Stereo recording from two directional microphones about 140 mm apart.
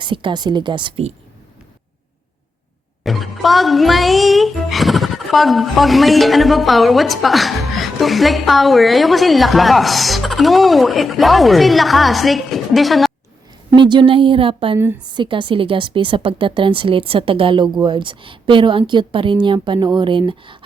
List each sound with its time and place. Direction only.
0.0 s a woman's voice: 35° right (ahead or behind)
3.0 s speech: centre (ahead or behind)
13.7 s a woman's voice: 35° right (ahead or behind)
14.8 s a woman's voice: 10° right (ahead or behind)
15.1 s a woman's voice: 35° right (ahead or behind)